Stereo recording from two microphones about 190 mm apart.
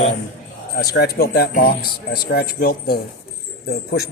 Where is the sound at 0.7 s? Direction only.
55° left (ahead or behind).